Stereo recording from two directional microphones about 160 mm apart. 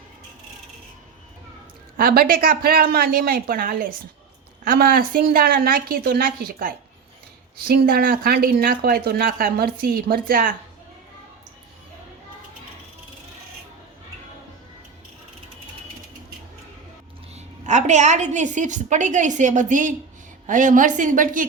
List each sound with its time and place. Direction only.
2.0 s speech: 65° right (ahead or behind)
17.3 s a woman's voice: 45° right (ahead or behind)